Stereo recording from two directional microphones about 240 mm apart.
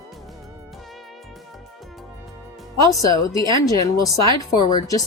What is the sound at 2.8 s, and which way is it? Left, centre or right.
Speech, centre.